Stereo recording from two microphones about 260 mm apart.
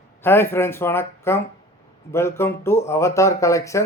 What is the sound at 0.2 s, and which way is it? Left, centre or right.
Speech, centre.